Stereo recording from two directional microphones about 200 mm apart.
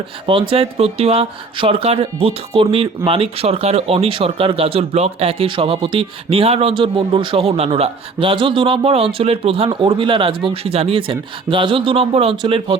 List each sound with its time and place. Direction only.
0.5 s speech: 30° right (ahead or behind)